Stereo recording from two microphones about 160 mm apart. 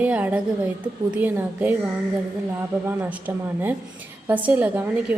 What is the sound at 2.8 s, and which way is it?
A woman's voice, 10° right (ahead or behind).